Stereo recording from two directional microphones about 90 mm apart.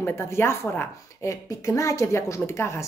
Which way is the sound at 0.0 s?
30° left (ahead or behind).